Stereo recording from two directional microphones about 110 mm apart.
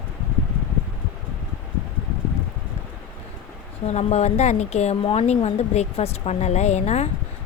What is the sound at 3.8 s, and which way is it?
A woman's voice, 85° left.